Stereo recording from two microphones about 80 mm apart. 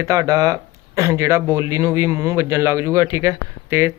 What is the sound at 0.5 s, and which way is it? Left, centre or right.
Speech, right.